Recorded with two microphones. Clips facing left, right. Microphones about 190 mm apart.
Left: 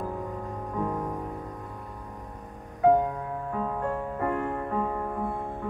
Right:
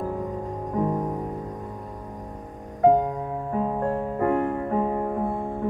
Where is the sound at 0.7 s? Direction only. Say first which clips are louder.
Right 5 dB; 20° right (ahead or behind).